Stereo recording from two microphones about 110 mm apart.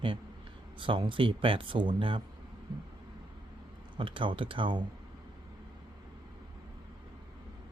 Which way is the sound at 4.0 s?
50° right (ahead or behind).